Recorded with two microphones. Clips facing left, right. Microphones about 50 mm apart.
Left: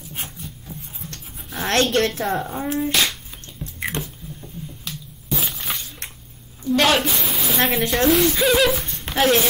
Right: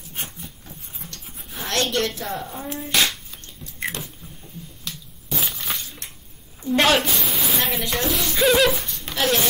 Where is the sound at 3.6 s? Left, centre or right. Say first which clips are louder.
Left 10 dB; centre.